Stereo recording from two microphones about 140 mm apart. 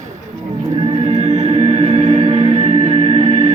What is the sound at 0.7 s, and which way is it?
Music, 45° right (ahead or behind).